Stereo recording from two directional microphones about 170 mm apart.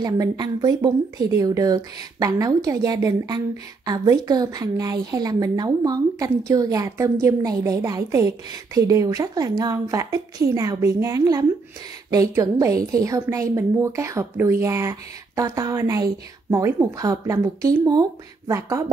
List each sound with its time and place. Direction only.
0.0 s a woman's voice: 25° right (ahead or behind)